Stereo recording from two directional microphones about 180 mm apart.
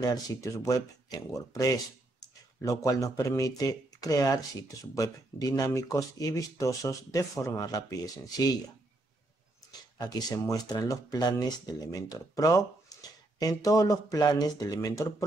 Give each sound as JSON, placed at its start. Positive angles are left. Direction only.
{"t": 0.0, "sound": "speech", "side_deg": 20}
{"t": 9.7, "sound": "speech", "side_deg": 20}